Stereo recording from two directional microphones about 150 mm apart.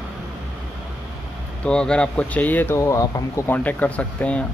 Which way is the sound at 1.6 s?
5° left (ahead or behind).